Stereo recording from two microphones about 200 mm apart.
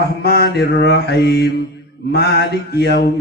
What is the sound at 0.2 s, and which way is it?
Mantra, 50° left (ahead or behind).